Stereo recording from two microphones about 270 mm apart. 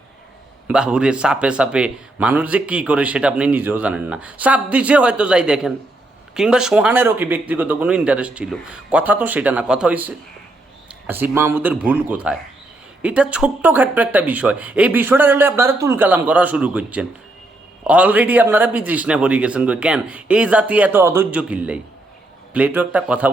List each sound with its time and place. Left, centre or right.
0.7 s a man's voice: centre